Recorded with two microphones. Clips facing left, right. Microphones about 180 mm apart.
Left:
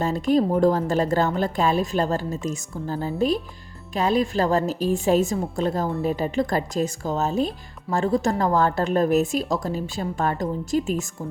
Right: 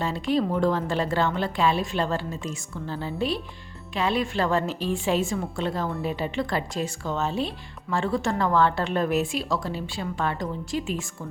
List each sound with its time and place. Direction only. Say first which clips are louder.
0.0 s a woman's voice: left 4 dB; 45° left (ahead or behind)